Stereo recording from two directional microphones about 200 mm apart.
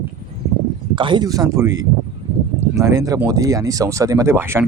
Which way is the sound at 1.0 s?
25° right (ahead or behind).